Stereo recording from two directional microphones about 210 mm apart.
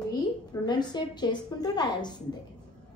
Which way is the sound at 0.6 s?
20° left (ahead or behind).